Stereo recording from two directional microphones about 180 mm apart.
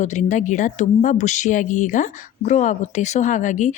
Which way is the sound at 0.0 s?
40° left (ahead or behind).